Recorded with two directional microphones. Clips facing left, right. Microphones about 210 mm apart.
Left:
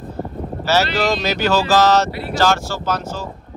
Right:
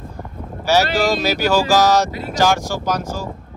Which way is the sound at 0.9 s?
10° right (ahead or behind).